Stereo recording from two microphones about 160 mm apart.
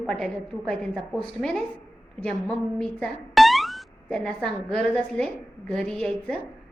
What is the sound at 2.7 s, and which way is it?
A woman's voice, 5° left (ahead or behind).